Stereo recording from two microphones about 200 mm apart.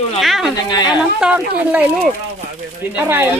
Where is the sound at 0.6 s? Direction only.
20° left (ahead or behind).